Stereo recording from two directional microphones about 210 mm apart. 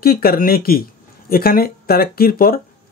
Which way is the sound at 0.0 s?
45° left (ahead or behind).